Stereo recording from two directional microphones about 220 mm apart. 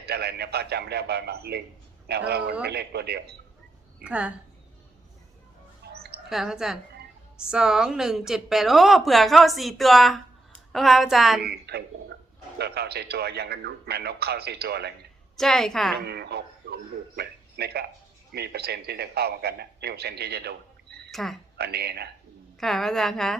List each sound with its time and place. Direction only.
0.1 s speech: 45° right (ahead or behind)
4.0 s a woman's voice: 5° right (ahead or behind)
5.9 s bird: 45° right (ahead or behind)
6.2 s a woman's voice: centre (ahead or behind)
11.4 s speech: 45° right (ahead or behind)
15.4 s a woman's voice: centre (ahead or behind)
16.0 s speech: 45° right (ahead or behind)
21.1 s speech: centre (ahead or behind)
21.6 s speech: 45° right (ahead or behind)
22.6 s a woman's voice: centre (ahead or behind)